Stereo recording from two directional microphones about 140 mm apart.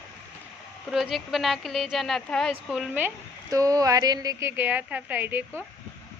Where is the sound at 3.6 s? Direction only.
25° right (ahead or behind).